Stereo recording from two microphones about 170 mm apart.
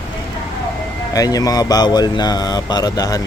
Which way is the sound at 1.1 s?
20° left (ahead or behind).